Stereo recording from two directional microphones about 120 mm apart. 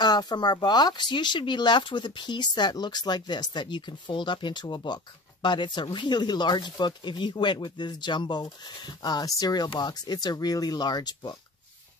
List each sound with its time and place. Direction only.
0.0 s speech: 35° left (ahead or behind)